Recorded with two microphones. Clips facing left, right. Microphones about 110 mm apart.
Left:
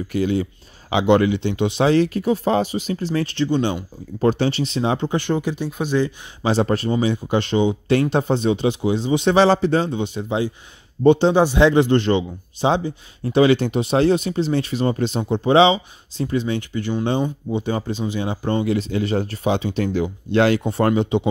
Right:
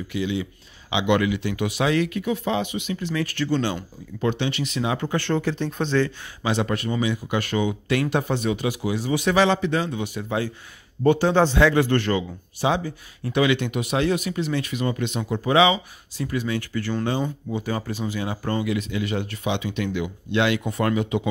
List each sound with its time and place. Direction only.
0.1 s speech: 45° left (ahead or behind); by 3.8 s 15° left (ahead or behind)
4.2 s a man's voice: 40° left (ahead or behind); by 6.1 s 15° left (ahead or behind)
6.4 s a man's voice: 35° left (ahead or behind)
18.7 s speech: 35° left (ahead or behind)